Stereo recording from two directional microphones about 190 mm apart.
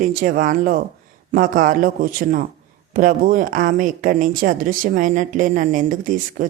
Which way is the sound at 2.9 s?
45° right (ahead or behind).